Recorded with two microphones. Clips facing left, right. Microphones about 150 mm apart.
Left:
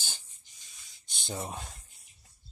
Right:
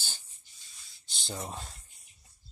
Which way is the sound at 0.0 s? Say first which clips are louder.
Left 1 dB; 15° left (ahead or behind).